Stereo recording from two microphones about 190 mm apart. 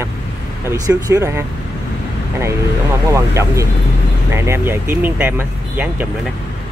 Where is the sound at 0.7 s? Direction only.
15° right (ahead or behind).